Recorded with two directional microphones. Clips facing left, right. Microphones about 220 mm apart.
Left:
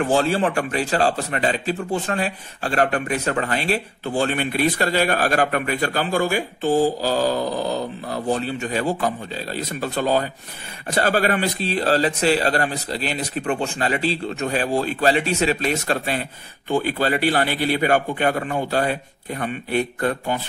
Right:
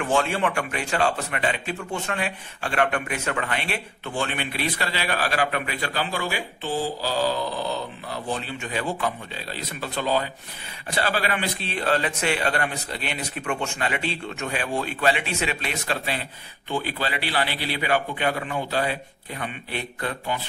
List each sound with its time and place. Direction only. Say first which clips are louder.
0.0 s a man's voice: left 4 dB; 35° left (ahead or behind)